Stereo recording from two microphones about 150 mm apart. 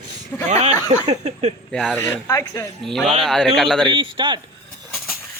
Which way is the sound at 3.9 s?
30° right (ahead or behind).